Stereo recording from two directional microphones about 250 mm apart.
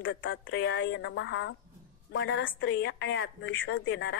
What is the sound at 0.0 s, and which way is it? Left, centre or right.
A woman's voice, left.